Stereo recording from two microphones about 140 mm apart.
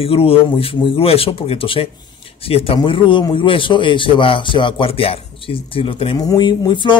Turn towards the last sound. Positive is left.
turn(degrees=35)  # may be behind; listen again after turning